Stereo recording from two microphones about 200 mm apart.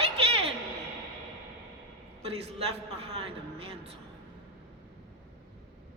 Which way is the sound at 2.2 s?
30° right (ahead or behind).